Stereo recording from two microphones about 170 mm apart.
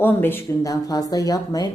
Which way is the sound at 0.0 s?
10° left (ahead or behind).